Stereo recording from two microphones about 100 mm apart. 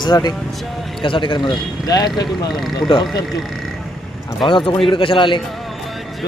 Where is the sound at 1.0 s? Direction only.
55° left (ahead or behind).